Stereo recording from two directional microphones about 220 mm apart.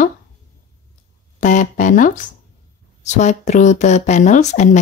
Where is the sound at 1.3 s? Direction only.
35° left (ahead or behind).